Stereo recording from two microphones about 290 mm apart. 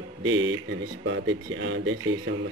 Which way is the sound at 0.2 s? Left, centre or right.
Right.